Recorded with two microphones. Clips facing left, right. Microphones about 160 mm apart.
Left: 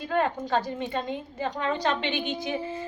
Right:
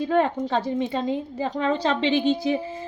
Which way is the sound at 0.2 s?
30° right (ahead or behind).